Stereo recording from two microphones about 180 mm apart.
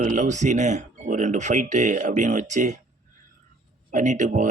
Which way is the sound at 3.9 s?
45° right (ahead or behind).